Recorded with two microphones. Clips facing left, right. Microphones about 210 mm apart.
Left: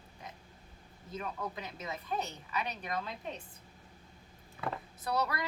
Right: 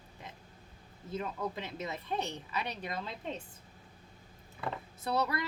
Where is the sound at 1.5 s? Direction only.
30° right (ahead or behind).